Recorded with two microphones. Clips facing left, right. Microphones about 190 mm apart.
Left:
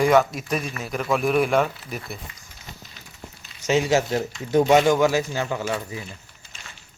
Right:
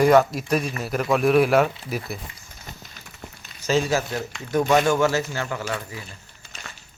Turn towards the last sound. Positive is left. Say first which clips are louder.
# left 2 dB
turn(degrees=15)  # may be behind; listen again after turning